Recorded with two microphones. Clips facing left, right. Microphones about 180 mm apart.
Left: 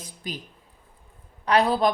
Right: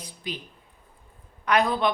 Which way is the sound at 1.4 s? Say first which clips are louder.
Left 2 dB; 35° left (ahead or behind).